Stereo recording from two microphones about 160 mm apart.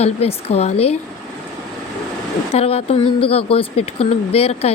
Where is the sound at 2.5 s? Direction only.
40° left (ahead or behind).